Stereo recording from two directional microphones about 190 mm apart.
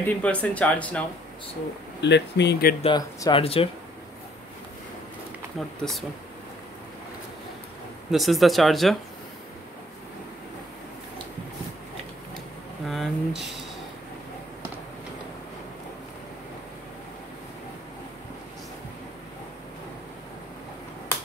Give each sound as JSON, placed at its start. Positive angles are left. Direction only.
{"t": 0.0, "sound": "speech", "side_deg": 5}
{"t": 2.0, "sound": "speech", "side_deg": 65}
{"t": 2.8, "sound": "speech", "side_deg": 20}
{"t": 5.8, "sound": "speech", "side_deg": 0}
{"t": 8.1, "sound": "speech", "side_deg": 0}
{"t": 12.8, "sound": "speech", "side_deg": 0}